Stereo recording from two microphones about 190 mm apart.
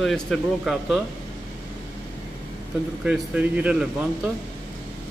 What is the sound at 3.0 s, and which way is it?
Speech, 5° right (ahead or behind).